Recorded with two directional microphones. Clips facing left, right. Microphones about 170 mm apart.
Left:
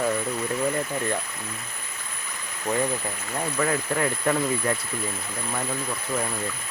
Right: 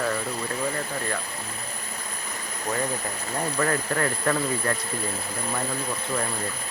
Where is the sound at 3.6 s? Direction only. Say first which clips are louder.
Left 1 dB; 10° left (ahead or behind).